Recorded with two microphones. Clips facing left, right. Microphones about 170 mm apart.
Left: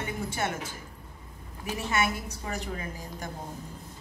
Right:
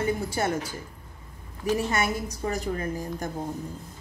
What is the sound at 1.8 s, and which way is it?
A woman's voice, 40° right (ahead or behind).